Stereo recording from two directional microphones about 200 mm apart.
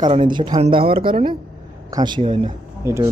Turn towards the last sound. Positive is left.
turn(degrees=-15)  # may be behind; listen again after turning